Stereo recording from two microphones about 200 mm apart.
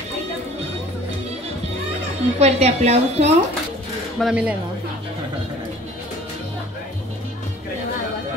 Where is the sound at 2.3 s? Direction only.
30° right (ahead or behind).